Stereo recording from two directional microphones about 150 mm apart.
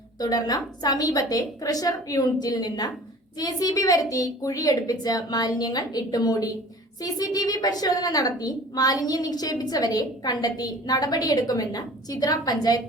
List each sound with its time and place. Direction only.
0.2 s a woman's voice: 25° left (ahead or behind)